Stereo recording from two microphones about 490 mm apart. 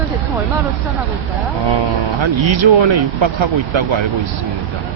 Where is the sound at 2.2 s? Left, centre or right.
Right.